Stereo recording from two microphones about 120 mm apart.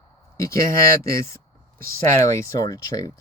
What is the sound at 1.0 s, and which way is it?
Speech, 25° left (ahead or behind).